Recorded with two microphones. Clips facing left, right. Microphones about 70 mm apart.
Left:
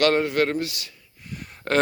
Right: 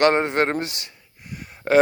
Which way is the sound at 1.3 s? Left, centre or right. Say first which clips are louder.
Right 5 dB; centre.